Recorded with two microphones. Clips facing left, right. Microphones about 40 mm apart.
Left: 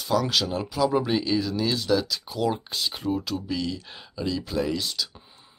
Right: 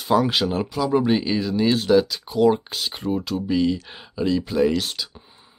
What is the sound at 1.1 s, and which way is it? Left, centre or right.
Speech, centre.